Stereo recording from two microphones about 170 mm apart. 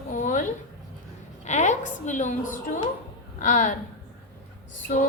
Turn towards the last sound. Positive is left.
turn(degrees=50)  # may be behind; listen again after turning